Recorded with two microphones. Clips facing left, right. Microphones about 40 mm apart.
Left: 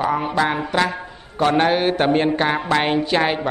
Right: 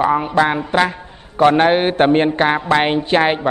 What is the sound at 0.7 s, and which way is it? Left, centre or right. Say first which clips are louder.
A man's voice: right 3 dB; right.